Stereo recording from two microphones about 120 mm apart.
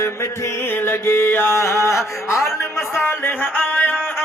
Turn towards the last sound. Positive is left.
turn(degrees=15)  # may be behind; listen again after turning